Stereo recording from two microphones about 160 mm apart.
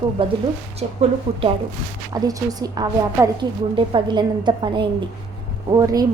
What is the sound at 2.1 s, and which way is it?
A woman's voice, 25° right (ahead or behind).